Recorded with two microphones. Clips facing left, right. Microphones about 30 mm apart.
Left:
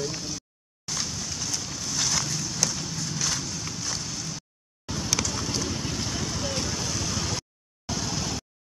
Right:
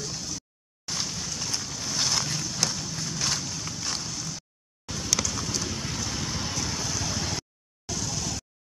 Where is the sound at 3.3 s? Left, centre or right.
Centre.